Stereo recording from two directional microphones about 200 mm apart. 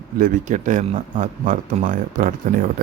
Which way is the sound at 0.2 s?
40° right (ahead or behind).